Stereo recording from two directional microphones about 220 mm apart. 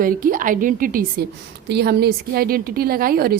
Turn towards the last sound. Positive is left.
turn(degrees=-40)  # may be behind; listen again after turning